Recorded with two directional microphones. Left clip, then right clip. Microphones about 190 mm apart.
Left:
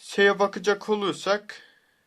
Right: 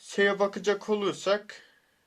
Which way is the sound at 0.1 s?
25° left (ahead or behind).